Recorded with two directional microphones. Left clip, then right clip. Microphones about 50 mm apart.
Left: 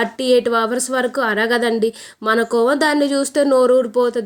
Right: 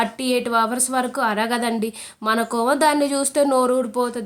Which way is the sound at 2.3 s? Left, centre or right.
Centre.